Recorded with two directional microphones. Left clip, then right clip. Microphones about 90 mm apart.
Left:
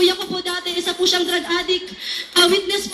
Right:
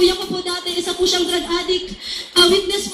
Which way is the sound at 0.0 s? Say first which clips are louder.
Right 1 dB; 30° left (ahead or behind).